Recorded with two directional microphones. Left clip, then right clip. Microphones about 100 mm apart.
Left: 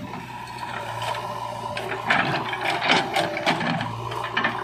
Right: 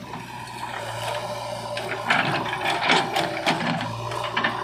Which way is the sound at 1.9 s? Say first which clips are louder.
Even; 15° right (ahead or behind).